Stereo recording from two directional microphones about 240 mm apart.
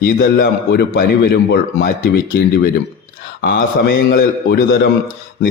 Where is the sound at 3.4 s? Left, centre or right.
Left.